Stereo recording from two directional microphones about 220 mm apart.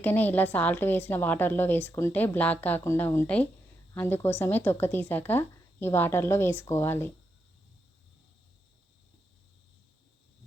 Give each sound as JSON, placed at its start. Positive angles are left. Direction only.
{"t": 0.0, "sound": "a woman's voice", "side_deg": 10}